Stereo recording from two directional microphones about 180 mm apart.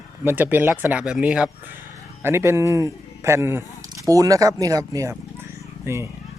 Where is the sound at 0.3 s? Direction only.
10° right (ahead or behind).